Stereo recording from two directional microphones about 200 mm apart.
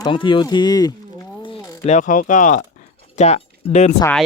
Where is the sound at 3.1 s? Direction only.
35° left (ahead or behind).